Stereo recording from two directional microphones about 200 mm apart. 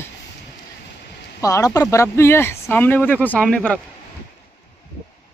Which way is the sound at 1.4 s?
15° left (ahead or behind).